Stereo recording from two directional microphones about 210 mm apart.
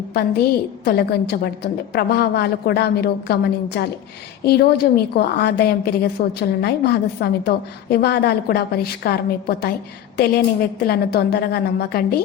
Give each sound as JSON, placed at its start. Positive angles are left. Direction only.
{"t": 0.1, "sound": "a woman's voice", "side_deg": 50}